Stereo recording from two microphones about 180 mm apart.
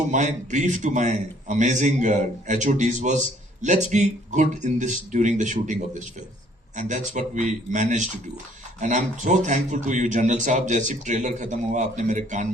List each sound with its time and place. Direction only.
0.1 s speech: 40° right (ahead or behind)